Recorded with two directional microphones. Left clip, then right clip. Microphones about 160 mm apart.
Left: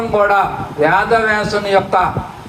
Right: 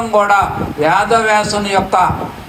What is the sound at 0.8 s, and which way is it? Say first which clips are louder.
Speech: right 1 dB; 25° right (ahead or behind).